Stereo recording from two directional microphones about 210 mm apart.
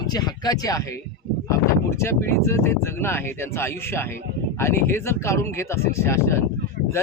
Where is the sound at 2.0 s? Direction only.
10° left (ahead or behind).